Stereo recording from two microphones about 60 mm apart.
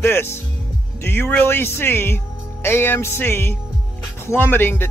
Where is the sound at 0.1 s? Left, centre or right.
Left.